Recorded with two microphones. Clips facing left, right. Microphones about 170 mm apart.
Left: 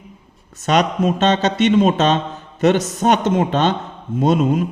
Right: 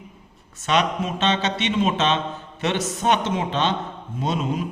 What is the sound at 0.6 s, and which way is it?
A man's voice, 40° left (ahead or behind).